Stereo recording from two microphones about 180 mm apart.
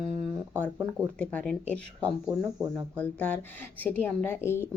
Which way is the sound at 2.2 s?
20° right (ahead or behind).